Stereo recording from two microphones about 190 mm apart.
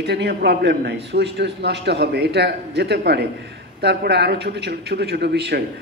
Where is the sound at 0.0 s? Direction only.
60° right (ahead or behind).